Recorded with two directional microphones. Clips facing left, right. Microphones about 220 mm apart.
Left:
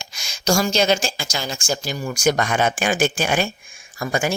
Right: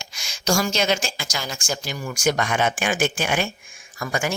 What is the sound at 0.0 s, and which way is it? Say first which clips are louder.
Speech: left 3 dB; 35° left (ahead or behind).